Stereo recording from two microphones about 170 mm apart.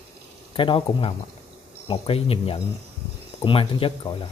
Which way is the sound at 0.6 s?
30° left (ahead or behind).